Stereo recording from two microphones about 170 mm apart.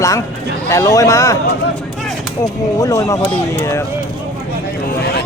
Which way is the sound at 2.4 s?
20° left (ahead or behind).